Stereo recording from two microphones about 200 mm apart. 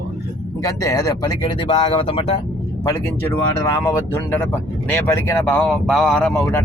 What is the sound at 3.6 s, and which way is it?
Speech, 15° left (ahead or behind).